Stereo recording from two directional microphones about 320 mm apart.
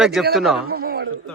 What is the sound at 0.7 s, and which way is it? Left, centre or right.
Speech, right.